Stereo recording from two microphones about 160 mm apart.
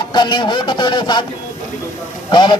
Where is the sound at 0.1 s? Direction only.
30° left (ahead or behind).